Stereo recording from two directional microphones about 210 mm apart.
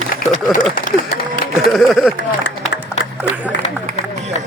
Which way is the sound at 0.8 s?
40° left (ahead or behind).